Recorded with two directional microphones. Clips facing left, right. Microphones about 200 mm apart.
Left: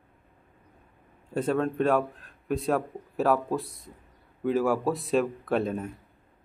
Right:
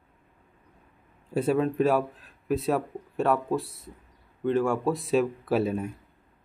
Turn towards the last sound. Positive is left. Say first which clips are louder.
# right 2 dB
turn(degrees=-5)  # may be behind; listen again after turning